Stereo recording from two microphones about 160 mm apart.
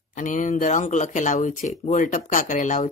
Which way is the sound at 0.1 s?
50° left (ahead or behind).